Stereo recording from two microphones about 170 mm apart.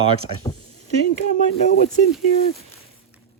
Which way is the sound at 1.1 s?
45° left (ahead or behind).